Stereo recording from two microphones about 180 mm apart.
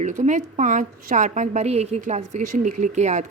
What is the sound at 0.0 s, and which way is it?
A woman's voice, 40° right (ahead or behind).